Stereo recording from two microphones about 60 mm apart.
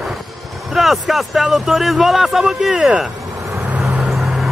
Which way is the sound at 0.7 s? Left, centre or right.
Centre.